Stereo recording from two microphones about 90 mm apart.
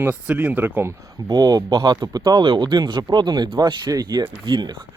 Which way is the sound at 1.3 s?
45° right (ahead or behind).